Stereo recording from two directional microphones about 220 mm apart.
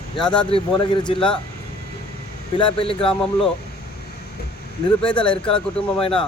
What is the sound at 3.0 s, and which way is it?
Speech, 5° left (ahead or behind).